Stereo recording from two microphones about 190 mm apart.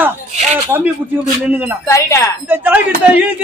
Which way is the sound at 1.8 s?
15° left (ahead or behind).